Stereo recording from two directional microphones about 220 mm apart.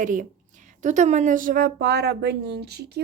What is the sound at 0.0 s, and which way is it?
Speech, 35° right (ahead or behind).